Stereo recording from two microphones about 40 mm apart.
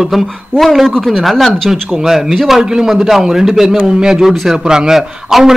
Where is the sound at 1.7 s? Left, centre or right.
Centre.